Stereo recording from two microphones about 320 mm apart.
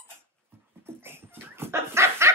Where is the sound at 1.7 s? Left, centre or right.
Centre.